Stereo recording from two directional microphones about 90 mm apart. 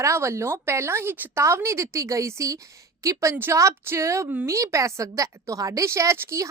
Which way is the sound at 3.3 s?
25° right (ahead or behind).